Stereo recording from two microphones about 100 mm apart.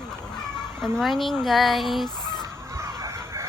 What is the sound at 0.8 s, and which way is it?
Speech, centre (ahead or behind).